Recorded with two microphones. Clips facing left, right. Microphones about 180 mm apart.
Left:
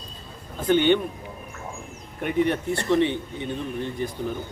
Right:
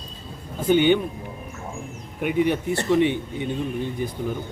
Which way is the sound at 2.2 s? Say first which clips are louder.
Right 1 dB; 5° right (ahead or behind).